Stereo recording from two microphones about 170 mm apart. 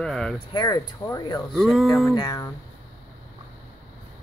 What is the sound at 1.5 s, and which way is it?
Speech, centre (ahead or behind).